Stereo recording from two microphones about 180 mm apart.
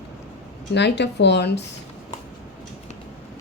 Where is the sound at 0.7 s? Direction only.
70° left (ahead or behind).